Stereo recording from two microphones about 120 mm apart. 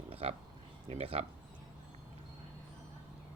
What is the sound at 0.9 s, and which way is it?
Speech, 55° right (ahead or behind).